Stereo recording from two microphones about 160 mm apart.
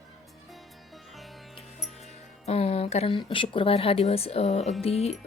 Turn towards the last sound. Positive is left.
turn(degrees=40)  # may be behind; listen again after turning